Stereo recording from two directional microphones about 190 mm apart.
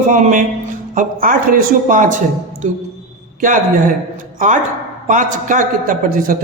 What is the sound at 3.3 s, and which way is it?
Speech, 45° right (ahead or behind).